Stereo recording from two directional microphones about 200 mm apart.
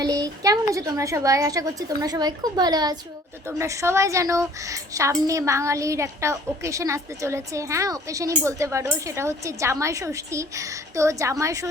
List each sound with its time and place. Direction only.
0.0 s a woman's voice: 20° right (ahead or behind)